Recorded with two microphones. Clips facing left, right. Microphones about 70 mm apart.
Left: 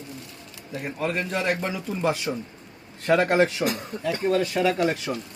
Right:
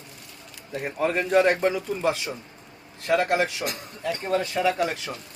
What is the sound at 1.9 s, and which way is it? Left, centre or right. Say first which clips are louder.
A man's voice: left 1 dB; centre.